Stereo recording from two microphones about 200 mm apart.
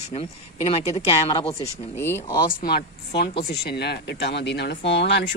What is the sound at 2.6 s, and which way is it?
A woman's voice, 55° left (ahead or behind).